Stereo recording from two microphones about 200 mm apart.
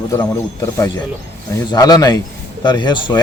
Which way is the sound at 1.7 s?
20° left (ahead or behind).